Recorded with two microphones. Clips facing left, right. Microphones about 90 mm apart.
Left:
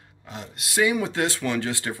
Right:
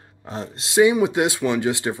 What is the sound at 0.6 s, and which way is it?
Speech, 20° right (ahead or behind).